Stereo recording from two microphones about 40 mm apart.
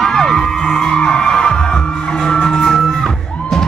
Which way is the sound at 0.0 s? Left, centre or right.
Centre.